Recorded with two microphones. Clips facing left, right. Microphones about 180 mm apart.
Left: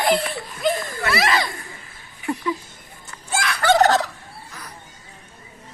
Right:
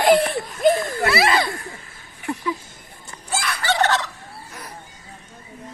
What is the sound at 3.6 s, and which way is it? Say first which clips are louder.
Gobble: left 5 dB; 40° left (ahead or behind).